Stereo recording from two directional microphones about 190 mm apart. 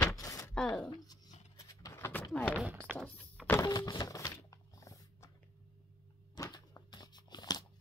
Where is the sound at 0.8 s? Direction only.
20° left (ahead or behind).